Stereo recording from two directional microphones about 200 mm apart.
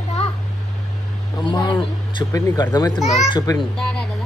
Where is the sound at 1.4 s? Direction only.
20° left (ahead or behind).